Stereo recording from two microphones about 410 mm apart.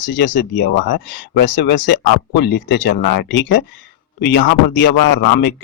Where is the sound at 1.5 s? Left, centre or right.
Left.